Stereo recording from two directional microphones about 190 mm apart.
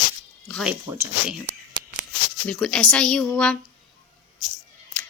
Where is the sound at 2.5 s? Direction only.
5° left (ahead or behind).